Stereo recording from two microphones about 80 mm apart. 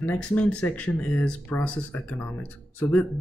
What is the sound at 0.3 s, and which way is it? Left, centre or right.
Speech, centre.